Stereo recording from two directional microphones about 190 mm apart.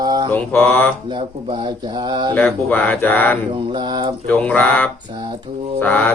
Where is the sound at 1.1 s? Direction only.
25° right (ahead or behind).